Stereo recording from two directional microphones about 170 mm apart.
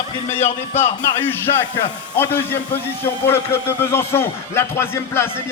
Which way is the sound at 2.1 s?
10° left (ahead or behind).